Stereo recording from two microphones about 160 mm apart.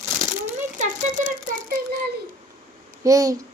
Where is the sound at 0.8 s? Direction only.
50° right (ahead or behind).